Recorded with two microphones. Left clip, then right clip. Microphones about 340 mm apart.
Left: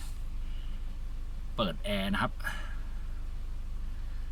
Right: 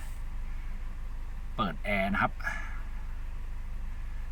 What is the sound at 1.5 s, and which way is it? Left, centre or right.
Speech, centre.